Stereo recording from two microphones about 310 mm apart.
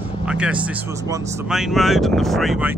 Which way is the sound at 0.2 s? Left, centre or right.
Centre.